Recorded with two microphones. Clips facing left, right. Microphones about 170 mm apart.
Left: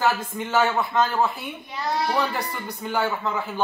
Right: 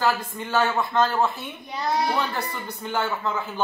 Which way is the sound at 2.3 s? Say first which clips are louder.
Left 1 dB; 10° left (ahead or behind).